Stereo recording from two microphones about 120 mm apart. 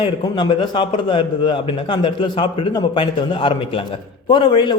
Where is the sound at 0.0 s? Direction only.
40° left (ahead or behind).